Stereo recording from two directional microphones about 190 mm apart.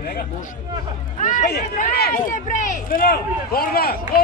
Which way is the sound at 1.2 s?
40° left (ahead or behind).